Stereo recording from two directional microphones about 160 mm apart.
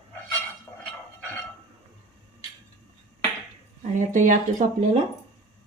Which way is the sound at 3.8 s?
50° right (ahead or behind).